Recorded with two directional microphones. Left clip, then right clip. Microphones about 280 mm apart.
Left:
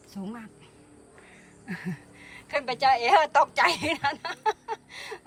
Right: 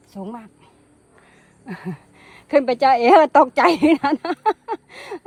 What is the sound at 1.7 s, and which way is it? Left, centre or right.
A woman's voice, centre.